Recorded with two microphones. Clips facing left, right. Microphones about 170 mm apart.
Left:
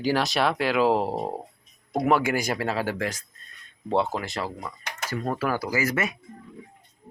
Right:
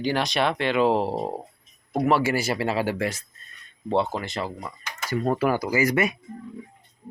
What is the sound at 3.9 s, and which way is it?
Speech, 5° left (ahead or behind).